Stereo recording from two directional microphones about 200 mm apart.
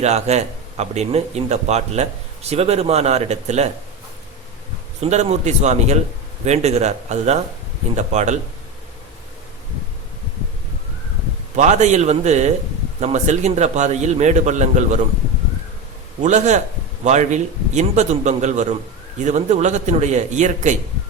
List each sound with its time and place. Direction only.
0.0 s speech: 35° right (ahead or behind)
4.9 s speech: 35° right (ahead or behind)
11.5 s speech: 35° right (ahead or behind)
16.2 s speech: 35° right (ahead or behind)